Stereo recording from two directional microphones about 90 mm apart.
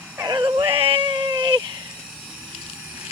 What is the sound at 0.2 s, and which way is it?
Music, 50° right (ahead or behind).